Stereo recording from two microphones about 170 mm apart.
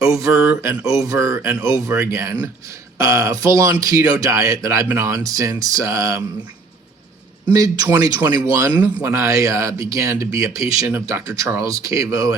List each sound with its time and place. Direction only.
0.0 s speech: 15° right (ahead or behind)
7.4 s speech: 20° right (ahead or behind)